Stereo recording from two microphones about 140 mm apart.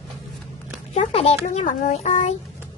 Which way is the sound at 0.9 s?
45° left (ahead or behind).